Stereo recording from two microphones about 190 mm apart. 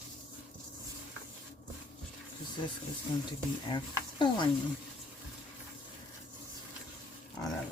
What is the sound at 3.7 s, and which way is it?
Speech, 25° left (ahead or behind).